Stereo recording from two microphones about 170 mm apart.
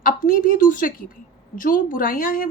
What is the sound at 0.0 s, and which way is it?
A woman's voice, 55° left (ahead or behind).